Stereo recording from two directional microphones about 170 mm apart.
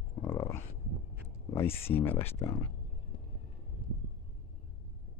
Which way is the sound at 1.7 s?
35° left (ahead or behind).